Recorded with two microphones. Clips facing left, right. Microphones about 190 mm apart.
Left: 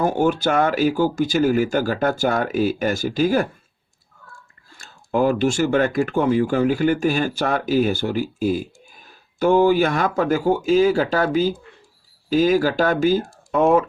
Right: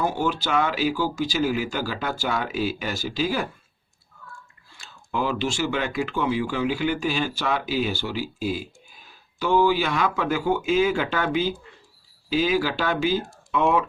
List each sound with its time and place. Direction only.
0.0 s speech: 50° left (ahead or behind)
4.7 s speech: 45° left (ahead or behind)